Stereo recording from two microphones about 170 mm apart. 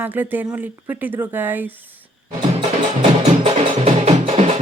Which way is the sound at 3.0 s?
35° right (ahead or behind).